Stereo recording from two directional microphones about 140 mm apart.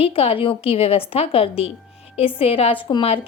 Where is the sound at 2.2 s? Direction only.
40° left (ahead or behind).